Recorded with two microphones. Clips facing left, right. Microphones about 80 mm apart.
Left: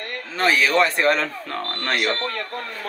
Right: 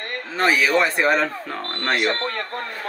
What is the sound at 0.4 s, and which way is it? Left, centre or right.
Speech, centre.